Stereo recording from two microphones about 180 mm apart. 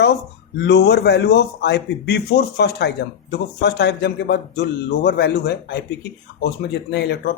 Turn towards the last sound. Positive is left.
turn(degrees=65)  # may be behind; listen again after turning